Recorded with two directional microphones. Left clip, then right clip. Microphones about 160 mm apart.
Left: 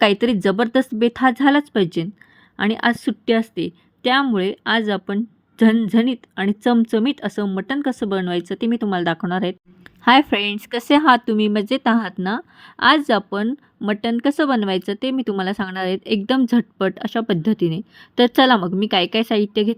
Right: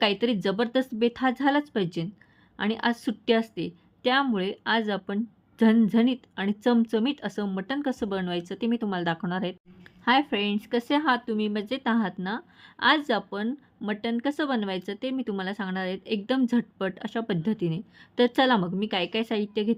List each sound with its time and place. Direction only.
0.0 s a woman's voice: 35° left (ahead or behind)
10.0 s a woman's voice: 45° left (ahead or behind)